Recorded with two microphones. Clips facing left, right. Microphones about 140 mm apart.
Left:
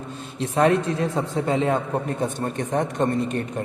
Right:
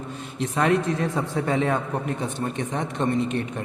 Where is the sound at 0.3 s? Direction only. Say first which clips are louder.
Left 3 dB; 30° left (ahead or behind).